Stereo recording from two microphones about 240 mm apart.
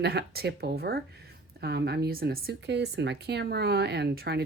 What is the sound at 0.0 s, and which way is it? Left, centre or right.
Speech, right.